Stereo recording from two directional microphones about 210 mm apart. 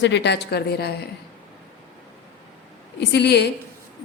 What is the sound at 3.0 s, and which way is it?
Speech, 50° left (ahead or behind).